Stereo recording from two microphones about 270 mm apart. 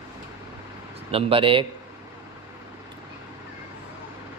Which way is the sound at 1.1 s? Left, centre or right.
Centre.